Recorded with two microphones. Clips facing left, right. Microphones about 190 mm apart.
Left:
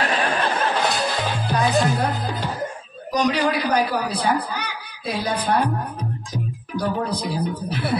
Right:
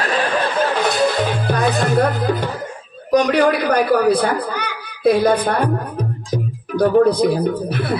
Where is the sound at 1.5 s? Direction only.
55° right (ahead or behind).